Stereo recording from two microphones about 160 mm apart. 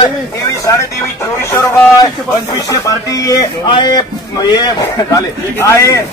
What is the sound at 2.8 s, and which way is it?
Speech, 20° left (ahead or behind).